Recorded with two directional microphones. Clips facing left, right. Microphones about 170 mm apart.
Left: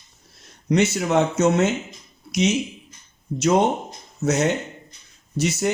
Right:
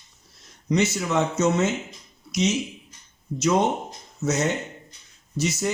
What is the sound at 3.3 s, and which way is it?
Speech, 60° left (ahead or behind).